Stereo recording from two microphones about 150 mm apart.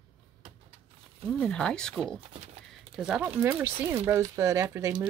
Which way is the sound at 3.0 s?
5° right (ahead or behind).